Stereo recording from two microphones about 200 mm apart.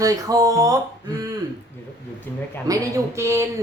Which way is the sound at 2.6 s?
15° right (ahead or behind).